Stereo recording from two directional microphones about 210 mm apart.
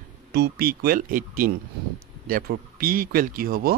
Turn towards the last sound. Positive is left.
turn(degrees=-45)  # may be behind; listen again after turning